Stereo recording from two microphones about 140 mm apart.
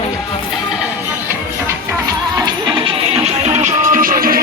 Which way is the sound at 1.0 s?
20° right (ahead or behind).